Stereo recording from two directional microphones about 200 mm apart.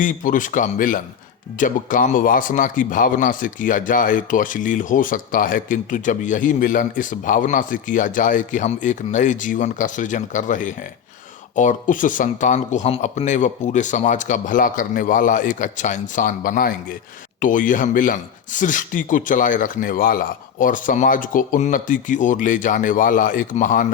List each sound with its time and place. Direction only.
0.0 s a man's voice: 40° left (ahead or behind)